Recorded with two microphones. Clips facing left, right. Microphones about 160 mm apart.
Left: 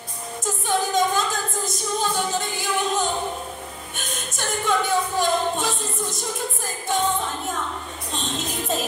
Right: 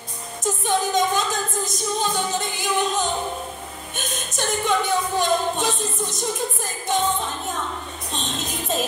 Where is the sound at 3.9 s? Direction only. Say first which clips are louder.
Right 4 dB; 20° right (ahead or behind).